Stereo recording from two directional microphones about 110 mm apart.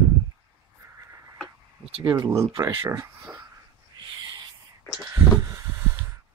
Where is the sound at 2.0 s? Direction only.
35° right (ahead or behind).